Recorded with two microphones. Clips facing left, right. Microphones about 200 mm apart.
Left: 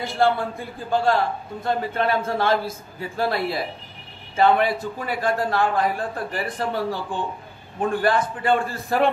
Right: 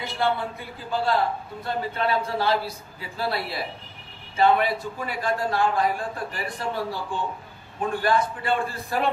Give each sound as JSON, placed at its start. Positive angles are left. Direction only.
{"t": 0.0, "sound": "a man's voice", "side_deg": 50}
{"t": 8.0, "sound": "a man's voice", "side_deg": 50}